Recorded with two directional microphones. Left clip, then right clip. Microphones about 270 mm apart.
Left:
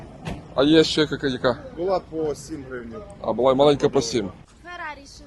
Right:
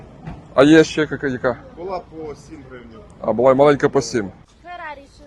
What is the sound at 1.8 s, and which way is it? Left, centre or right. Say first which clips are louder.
Speech: left 4 dB; left.